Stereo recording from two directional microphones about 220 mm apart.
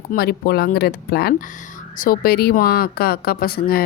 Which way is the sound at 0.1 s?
45° left (ahead or behind).